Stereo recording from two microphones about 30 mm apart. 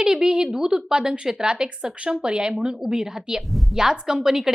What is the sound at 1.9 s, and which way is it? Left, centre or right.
A woman's voice, right.